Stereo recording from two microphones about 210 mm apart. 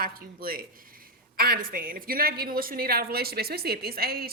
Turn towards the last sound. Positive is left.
turn(degrees=-45)  # may be behind; listen again after turning